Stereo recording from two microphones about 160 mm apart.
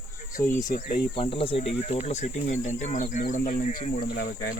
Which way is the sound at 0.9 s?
35° left (ahead or behind).